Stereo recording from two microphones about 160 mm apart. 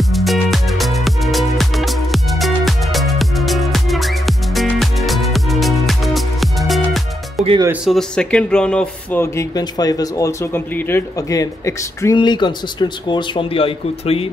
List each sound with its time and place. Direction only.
0.1 s music: centre (ahead or behind)
7.8 s speech: 5° left (ahead or behind); by 14.2 s 35° left (ahead or behind)